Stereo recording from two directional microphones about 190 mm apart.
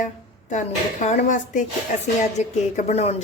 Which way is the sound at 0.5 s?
40° left (ahead or behind).